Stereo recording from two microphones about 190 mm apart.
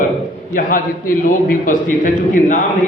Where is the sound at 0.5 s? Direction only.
45° left (ahead or behind).